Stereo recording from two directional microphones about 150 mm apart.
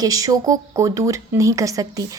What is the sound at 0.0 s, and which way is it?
A woman's voice, 25° right (ahead or behind).